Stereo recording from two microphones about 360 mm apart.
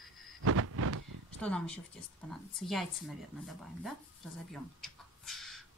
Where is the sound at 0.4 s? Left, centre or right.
Right.